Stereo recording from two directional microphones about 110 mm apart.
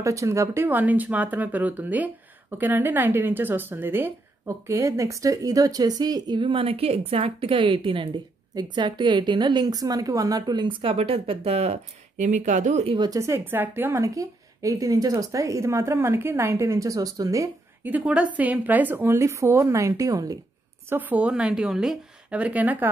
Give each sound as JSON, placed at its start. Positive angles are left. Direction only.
{"t": 0.0, "sound": "a woman's voice", "side_deg": -30}
{"t": 8.5, "sound": "a woman's voice", "side_deg": -45}
{"t": 10.8, "sound": "speech", "side_deg": -60}
{"t": 12.9, "sound": "a woman's voice", "side_deg": -40}
{"t": 13.2, "sound": "speech", "side_deg": -20}
{"t": 14.0, "sound": "speech", "side_deg": -30}
{"t": 17.8, "sound": "speech", "side_deg": -15}
{"t": 20.9, "sound": "speech", "side_deg": -15}